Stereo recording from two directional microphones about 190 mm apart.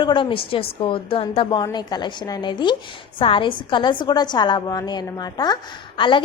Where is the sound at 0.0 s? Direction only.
25° left (ahead or behind).